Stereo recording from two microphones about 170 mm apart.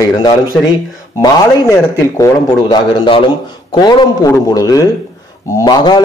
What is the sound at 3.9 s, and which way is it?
Speech, 20° left (ahead or behind).